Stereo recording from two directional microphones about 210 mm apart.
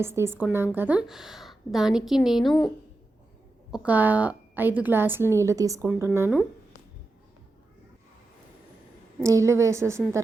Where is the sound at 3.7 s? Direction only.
5° right (ahead or behind).